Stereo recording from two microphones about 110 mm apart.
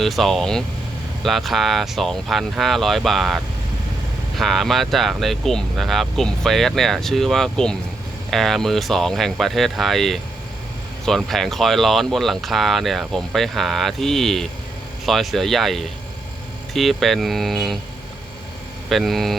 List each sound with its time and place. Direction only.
0.0 s speech: centre (ahead or behind)
18.9 s speech: centre (ahead or behind)